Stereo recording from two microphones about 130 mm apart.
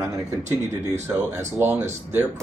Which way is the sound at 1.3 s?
15° right (ahead or behind).